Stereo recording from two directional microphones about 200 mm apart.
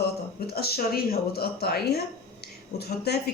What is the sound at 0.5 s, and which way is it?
A woman's voice, 50° left (ahead or behind).